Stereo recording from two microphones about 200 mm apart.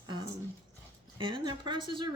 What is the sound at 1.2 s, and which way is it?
Speech, 25° right (ahead or behind).